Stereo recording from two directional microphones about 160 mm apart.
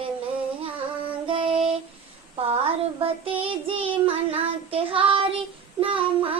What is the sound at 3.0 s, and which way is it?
Child singing, 35° right (ahead or behind).